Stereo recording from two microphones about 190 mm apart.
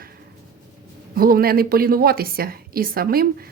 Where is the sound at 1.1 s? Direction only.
50° right (ahead or behind).